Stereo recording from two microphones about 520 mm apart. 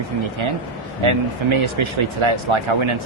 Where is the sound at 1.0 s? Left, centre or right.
Right.